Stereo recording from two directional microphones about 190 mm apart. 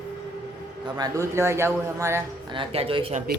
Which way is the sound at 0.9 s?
20° right (ahead or behind).